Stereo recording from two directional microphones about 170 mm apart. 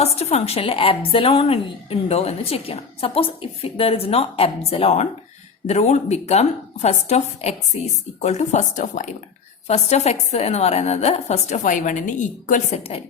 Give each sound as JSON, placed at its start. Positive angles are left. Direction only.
{"t": 0.0, "sound": "speech", "side_deg": 40}